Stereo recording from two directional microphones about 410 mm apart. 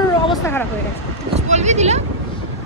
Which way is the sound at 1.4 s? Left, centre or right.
Centre.